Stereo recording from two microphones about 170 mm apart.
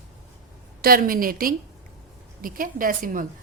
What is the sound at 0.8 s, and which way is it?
A woman's voice, 60° right (ahead or behind).